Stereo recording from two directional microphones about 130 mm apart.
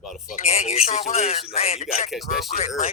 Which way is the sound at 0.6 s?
55° left (ahead or behind).